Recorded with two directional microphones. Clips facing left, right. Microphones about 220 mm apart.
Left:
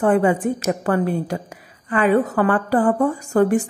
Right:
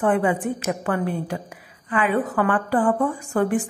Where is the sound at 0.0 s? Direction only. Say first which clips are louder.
Left 4 dB; 40° left (ahead or behind).